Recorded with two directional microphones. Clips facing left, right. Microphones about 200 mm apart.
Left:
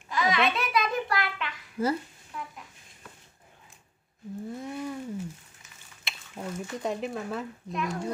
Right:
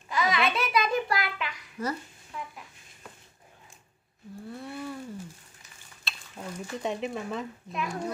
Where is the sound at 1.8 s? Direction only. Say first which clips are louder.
Left 5 dB; 30° left (ahead or behind).